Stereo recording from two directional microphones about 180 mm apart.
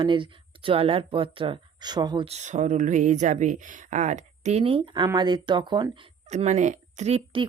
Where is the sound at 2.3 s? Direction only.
40° right (ahead or behind).